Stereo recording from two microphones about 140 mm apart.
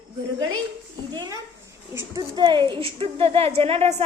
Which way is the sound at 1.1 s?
30° right (ahead or behind).